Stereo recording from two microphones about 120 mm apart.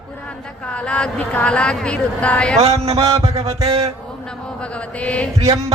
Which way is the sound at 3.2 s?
60° right (ahead or behind).